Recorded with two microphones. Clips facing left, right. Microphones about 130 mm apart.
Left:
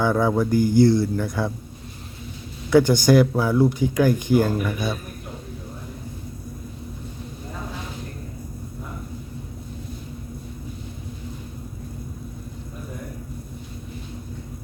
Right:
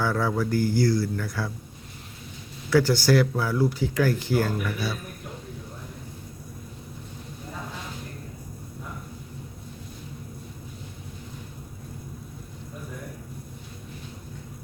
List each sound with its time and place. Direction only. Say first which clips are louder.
0.0 s speech: left 5 dB; 20° left (ahead or behind)
2.6 s speech: left 5 dB; 20° left (ahead or behind)